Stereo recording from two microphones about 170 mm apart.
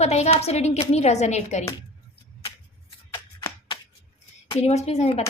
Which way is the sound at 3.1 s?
25° left (ahead or behind).